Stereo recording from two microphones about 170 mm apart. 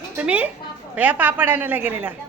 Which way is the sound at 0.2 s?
10° right (ahead or behind).